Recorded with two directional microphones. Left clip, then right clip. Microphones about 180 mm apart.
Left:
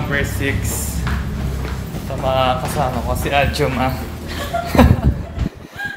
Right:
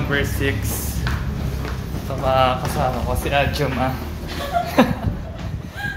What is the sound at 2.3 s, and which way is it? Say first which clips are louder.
Speech: even; centre (ahead or behind).